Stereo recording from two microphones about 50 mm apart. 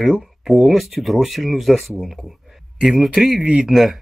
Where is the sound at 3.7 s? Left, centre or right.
Centre.